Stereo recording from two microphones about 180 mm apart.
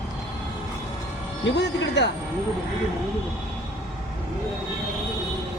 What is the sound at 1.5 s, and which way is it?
Speech, 80° left.